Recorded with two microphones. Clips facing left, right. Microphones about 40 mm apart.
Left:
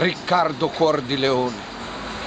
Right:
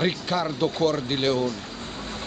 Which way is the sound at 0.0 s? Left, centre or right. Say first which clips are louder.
Left 6 dB; centre.